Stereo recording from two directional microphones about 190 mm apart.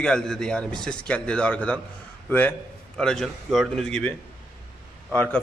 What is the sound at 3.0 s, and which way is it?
A man's voice, 5° left (ahead or behind).